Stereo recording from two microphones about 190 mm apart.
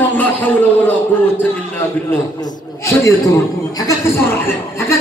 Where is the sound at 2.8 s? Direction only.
15° left (ahead or behind).